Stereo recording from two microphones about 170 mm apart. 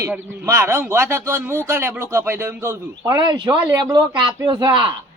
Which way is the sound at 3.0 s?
25° right (ahead or behind).